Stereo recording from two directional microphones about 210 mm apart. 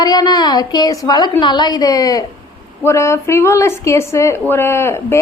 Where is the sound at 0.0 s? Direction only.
20° left (ahead or behind).